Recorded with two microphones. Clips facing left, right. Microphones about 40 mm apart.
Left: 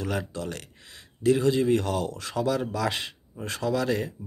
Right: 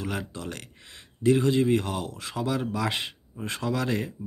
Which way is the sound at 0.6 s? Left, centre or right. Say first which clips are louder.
Even; right.